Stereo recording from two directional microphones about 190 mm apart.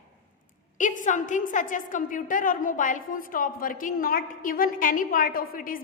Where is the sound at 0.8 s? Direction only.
40° left (ahead or behind).